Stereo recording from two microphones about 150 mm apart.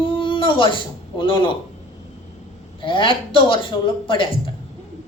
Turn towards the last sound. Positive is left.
turn(degrees=35)  # may be behind; listen again after turning